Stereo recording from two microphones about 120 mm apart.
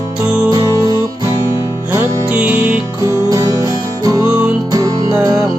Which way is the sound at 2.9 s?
25° right (ahead or behind).